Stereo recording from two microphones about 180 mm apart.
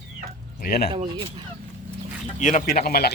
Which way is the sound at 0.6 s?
55° left (ahead or behind).